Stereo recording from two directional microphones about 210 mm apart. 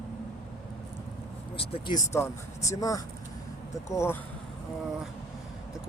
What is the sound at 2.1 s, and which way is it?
Speech, 15° left (ahead or behind).